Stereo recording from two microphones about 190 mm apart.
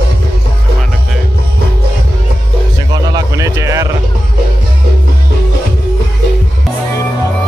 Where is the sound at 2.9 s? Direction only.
20° right (ahead or behind).